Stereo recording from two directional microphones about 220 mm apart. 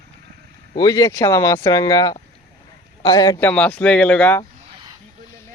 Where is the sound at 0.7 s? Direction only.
15° left (ahead or behind).